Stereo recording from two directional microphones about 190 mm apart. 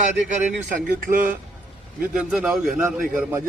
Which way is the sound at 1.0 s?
45° right (ahead or behind).